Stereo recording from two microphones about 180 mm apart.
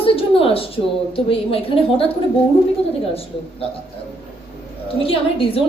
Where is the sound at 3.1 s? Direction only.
35° left (ahead or behind).